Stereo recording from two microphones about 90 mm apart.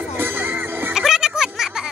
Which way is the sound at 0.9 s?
5° right (ahead or behind).